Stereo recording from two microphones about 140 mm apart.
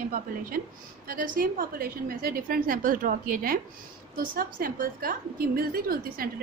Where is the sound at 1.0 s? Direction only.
85° right.